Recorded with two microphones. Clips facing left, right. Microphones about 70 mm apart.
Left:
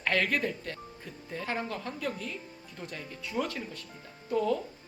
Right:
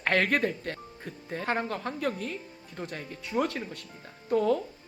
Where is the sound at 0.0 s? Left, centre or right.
Right.